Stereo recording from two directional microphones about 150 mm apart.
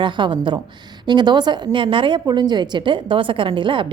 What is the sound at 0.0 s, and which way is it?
A woman's voice, 30° right (ahead or behind).